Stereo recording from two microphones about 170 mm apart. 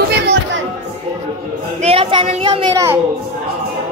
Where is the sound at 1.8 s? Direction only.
35° right (ahead or behind).